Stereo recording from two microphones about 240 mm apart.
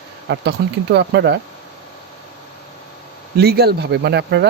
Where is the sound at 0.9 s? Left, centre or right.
Right.